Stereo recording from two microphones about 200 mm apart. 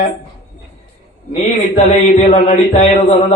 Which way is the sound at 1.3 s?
30° left (ahead or behind).